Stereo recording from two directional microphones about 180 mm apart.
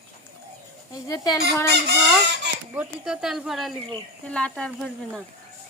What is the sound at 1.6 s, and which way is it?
Speech, 65° right (ahead or behind).